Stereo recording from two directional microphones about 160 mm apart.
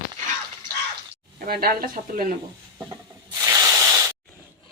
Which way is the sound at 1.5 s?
65° right (ahead or behind).